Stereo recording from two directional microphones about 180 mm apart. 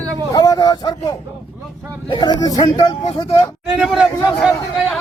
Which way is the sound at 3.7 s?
Centre (ahead or behind).